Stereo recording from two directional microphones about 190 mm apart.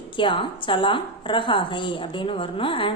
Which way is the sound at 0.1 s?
25° left (ahead or behind).